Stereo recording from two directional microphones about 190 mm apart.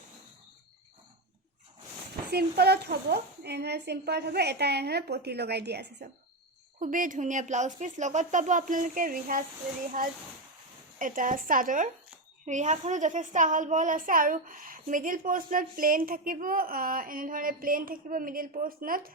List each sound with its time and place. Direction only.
2.3 s a woman's voice: 60° right (ahead or behind)
6.7 s a woman's voice: 45° right (ahead or behind)
11.0 s a child's voice: 45° right (ahead or behind)